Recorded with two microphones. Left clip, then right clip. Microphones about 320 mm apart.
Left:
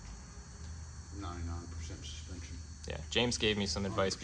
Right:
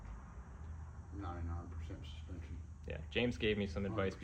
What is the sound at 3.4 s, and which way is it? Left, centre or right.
Speech, centre.